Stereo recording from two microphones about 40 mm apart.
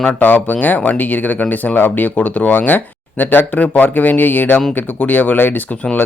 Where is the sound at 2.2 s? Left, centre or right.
Left.